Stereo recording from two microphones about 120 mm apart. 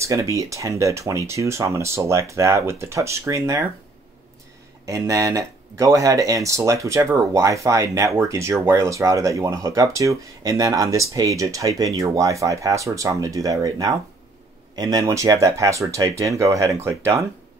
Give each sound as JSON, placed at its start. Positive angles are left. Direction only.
{"t": 0.0, "sound": "speech", "side_deg": -25}
{"t": 4.8, "sound": "speech", "side_deg": -25}